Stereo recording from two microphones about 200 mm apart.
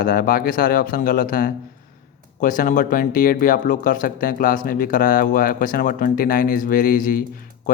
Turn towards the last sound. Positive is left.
turn(degrees=45)  # may be behind; listen again after turning